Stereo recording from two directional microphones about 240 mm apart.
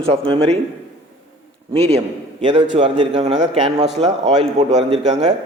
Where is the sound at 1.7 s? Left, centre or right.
Right.